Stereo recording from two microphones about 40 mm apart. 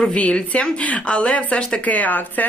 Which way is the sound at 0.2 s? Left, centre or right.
Left.